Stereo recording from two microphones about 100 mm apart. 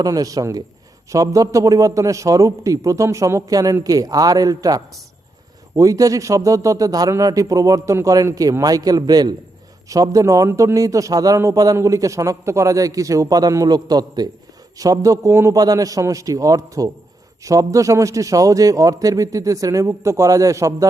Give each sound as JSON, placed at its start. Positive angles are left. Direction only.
{"t": 0.0, "sound": "a man's voice", "side_deg": -35}